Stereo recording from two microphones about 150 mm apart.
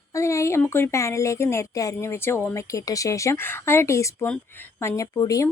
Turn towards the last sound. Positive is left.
turn(degrees=20)  # may be behind; listen again after turning